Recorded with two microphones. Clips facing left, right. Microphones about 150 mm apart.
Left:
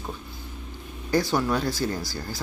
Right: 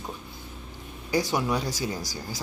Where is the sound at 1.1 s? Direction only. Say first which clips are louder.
Left 2 dB; 15° right (ahead or behind).